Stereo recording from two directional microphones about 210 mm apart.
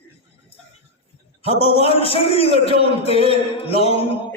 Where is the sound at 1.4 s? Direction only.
25° left (ahead or behind).